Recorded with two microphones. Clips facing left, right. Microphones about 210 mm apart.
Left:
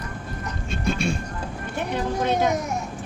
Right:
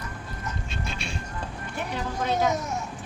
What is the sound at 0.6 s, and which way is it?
Vehicle, 50° left (ahead or behind).